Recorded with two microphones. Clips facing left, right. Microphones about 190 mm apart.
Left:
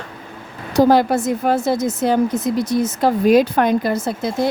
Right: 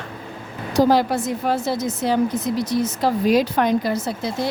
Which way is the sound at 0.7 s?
55° left (ahead or behind).